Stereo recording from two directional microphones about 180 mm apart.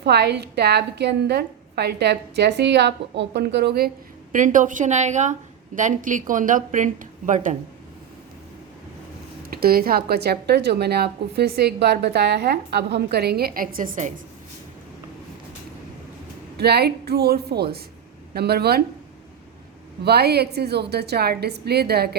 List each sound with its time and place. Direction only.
0.0 s a woman's voice: 65° right (ahead or behind); by 7.5 s 45° right (ahead or behind)
9.5 s a woman's voice: 55° right (ahead or behind)
16.6 s a woman's voice: 65° right (ahead or behind)
20.1 s a woman's voice: 65° right (ahead or behind)